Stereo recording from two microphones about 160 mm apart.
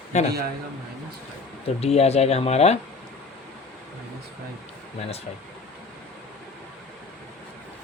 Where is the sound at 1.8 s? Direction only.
40° left (ahead or behind).